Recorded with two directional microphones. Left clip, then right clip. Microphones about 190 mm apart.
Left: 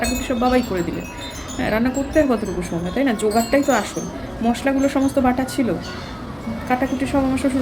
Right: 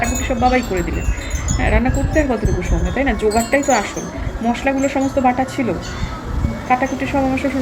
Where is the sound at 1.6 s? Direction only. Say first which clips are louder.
Right 2 dB; 15° left (ahead or behind).